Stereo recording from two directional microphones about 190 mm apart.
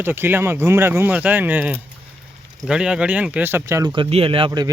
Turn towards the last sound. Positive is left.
turn(degrees=-30)  # may be behind; listen again after turning